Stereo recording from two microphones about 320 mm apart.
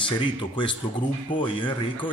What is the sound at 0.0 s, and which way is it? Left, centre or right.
Speech, centre.